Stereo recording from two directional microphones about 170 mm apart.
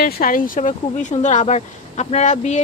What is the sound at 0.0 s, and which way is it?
A woman's voice, 55° left (ahead or behind).